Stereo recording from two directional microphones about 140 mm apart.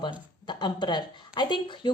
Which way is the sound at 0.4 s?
30° left (ahead or behind).